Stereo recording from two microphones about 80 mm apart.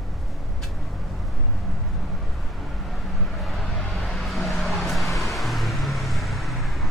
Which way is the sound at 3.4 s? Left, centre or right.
Centre.